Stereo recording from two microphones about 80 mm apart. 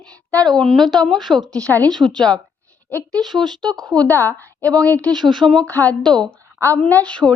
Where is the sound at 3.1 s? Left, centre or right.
Right.